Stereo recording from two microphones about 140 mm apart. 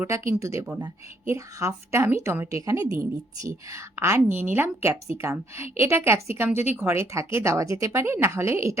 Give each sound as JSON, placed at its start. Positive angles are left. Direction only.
{"t": 0.0, "sound": "a woman's voice", "side_deg": -20}